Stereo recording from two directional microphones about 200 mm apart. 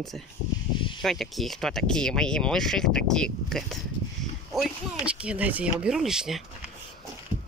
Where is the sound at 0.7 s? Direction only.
25° left (ahead or behind).